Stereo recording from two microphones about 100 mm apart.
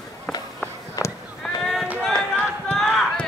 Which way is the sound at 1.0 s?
40° left (ahead or behind).